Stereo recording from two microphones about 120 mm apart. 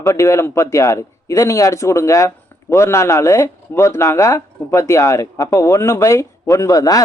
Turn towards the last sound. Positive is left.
turn(degrees=30)  # may be behind; listen again after turning